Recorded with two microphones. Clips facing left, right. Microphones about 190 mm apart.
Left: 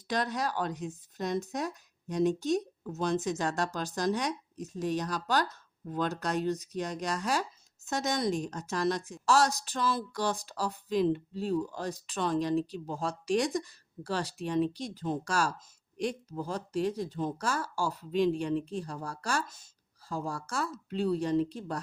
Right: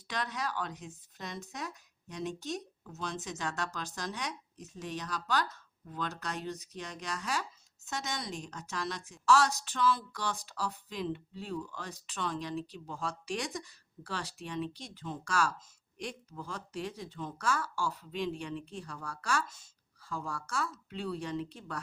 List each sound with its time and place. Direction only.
0.1 s a woman's voice: 40° left (ahead or behind)